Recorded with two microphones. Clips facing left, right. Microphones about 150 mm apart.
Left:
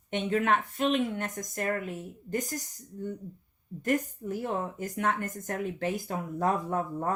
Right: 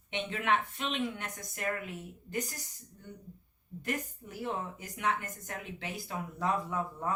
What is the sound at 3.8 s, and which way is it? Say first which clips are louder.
A woman's voice: left 9 dB; 45° left (ahead or behind).